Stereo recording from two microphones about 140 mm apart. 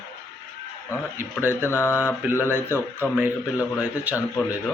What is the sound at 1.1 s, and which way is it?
Speech, 15° right (ahead or behind).